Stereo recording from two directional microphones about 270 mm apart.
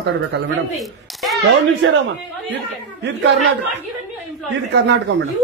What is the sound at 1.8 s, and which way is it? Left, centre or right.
Speech, right.